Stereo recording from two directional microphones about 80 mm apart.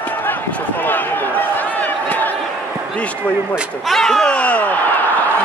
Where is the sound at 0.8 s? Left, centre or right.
Left.